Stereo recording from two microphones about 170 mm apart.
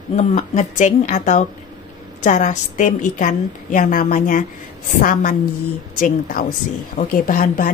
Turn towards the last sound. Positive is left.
turn(degrees=55)  # may be behind; listen again after turning